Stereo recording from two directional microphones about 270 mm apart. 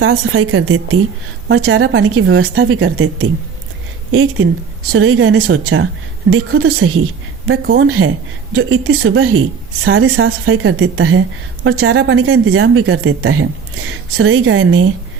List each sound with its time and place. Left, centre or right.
0.0 s a woman's voice: right